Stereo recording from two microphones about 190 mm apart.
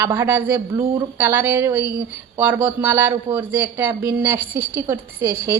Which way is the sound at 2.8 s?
15° right (ahead or behind).